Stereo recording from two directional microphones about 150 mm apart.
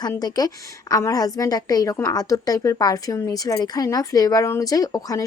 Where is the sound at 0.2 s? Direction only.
25° left (ahead or behind).